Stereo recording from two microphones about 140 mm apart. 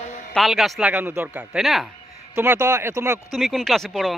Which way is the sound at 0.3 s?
Centre (ahead or behind).